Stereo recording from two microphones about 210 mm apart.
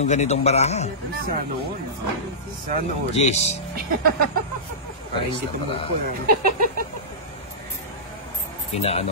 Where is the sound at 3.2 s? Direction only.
30° left (ahead or behind).